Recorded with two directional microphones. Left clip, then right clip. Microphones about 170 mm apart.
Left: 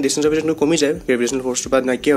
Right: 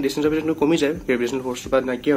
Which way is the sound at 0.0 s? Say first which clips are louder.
Left 4 dB; 25° left (ahead or behind).